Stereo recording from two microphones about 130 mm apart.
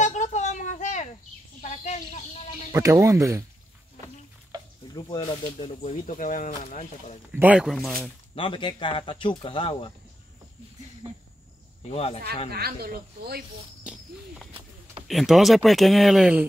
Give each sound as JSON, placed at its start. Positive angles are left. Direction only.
{"t": 0.0, "sound": "a sound", "side_deg": 65}
{"t": 2.7, "sound": "speech", "side_deg": -20}
{"t": 4.9, "sound": "speech", "side_deg": 35}
{"t": 5.8, "sound": "speech", "side_deg": 70}
{"t": 7.3, "sound": "speech", "side_deg": -15}
{"t": 7.6, "sound": "speech", "side_deg": 0}
{"t": 8.4, "sound": "speech", "side_deg": 40}
{"t": 11.9, "sound": "speech", "side_deg": 50}
{"t": 13.8, "sound": "a sound", "side_deg": -5}
{"t": 15.0, "sound": "speech", "side_deg": 0}